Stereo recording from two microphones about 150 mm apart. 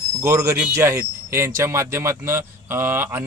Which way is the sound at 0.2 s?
20° right (ahead or behind).